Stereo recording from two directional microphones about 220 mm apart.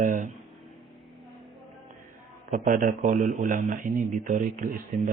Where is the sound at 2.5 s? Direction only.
35° right (ahead or behind).